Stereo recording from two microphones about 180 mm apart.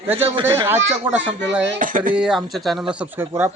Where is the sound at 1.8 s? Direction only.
50° right (ahead or behind).